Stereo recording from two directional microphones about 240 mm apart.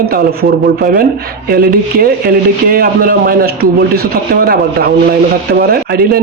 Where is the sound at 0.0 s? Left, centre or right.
Right.